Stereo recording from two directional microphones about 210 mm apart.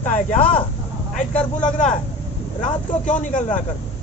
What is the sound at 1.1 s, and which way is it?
Speech, 5° left (ahead or behind).